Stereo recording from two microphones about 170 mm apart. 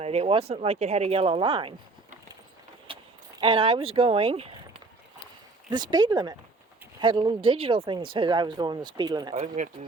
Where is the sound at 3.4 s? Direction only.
30° right (ahead or behind).